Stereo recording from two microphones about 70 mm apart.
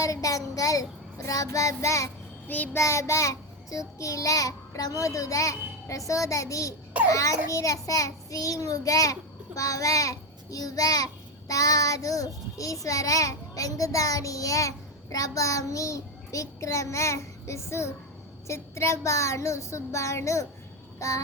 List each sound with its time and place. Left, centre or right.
0.0 s child singing: left
6.1 s a child's voice: left